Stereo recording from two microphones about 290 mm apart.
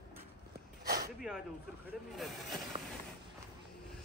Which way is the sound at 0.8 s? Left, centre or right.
Right.